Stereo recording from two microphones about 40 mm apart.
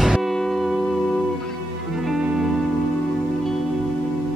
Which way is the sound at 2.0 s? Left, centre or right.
Centre.